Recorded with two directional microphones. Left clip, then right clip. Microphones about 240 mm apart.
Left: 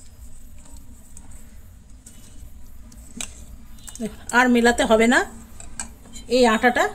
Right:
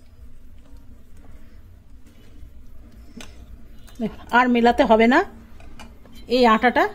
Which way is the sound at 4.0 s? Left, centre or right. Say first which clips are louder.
Right 1 dB; right.